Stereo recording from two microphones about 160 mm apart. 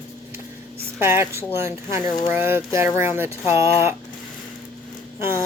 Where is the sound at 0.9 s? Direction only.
15° right (ahead or behind).